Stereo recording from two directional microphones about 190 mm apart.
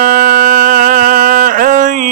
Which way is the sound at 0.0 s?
45° right (ahead or behind).